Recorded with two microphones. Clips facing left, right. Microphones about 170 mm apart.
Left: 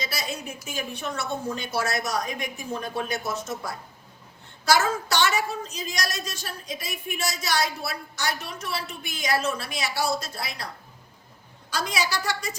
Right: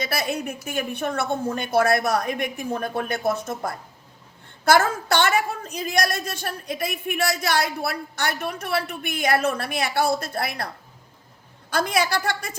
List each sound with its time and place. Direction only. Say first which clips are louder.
0.0 s a woman's voice: right 6 dB; 60° right (ahead or behind)
11.7 s a woman's voice: right 6 dB; 55° right (ahead or behind)